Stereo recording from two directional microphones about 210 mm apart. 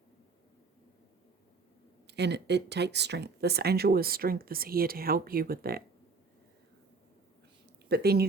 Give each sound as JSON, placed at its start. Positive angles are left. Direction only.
{"t": 2.0, "sound": "speech", "side_deg": -55}
{"t": 7.9, "sound": "speech", "side_deg": -50}